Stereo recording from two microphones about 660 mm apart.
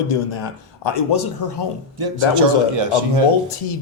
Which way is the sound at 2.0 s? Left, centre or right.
Right.